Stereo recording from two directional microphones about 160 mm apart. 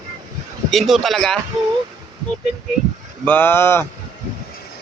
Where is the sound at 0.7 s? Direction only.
Centre (ahead or behind).